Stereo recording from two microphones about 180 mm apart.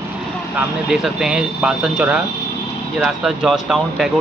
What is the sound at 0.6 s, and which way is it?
Speech, centre (ahead or behind).